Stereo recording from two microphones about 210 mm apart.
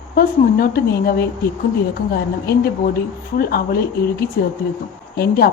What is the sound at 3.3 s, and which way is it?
Speech, 45° left (ahead or behind).